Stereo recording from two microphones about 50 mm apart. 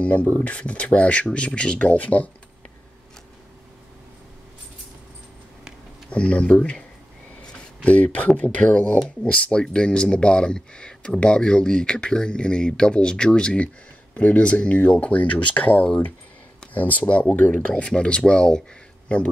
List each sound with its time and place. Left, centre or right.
0.4 s speech: left
6.0 s speech: left